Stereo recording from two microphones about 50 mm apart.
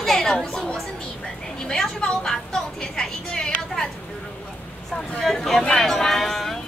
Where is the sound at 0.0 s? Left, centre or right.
Centre.